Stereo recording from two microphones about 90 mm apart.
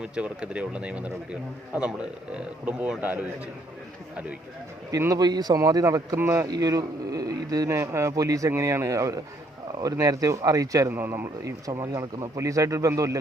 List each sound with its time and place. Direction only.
0.0 s a man's voice: 15° right (ahead or behind)
4.9 s a man's voice: 40° right (ahead or behind)
5.2 s speech: 50° right (ahead or behind)
6.1 s speech: 25° right (ahead or behind)
6.4 s a man's voice: 40° right (ahead or behind)
10.9 s speech: 25° right (ahead or behind)
11.6 s a man's voice: 40° right (ahead or behind)